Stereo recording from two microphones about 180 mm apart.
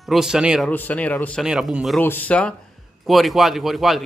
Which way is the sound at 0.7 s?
10° left (ahead or behind).